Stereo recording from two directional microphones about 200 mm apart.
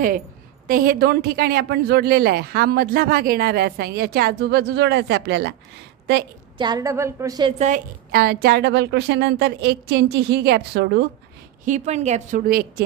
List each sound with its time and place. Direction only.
0.7 s speech: 45° right (ahead or behind)
6.6 s a woman's voice: 20° right (ahead or behind)
7.5 s a woman's voice: 35° right (ahead or behind)
8.1 s a woman's voice: 50° right (ahead or behind)
11.6 s a woman's voice: 35° right (ahead or behind)